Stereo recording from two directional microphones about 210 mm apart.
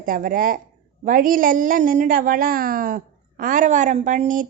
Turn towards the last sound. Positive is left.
turn(degrees=-40)  # may be behind; listen again after turning